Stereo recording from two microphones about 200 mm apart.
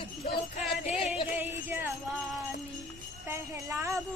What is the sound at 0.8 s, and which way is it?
Music, 35° left (ahead or behind).